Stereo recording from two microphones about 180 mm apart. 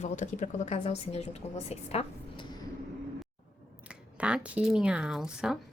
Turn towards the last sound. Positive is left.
turn(degrees=-5)  # may be behind; listen again after turning